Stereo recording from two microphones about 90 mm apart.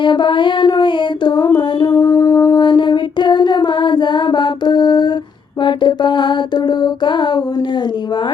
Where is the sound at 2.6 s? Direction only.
60° left (ahead or behind).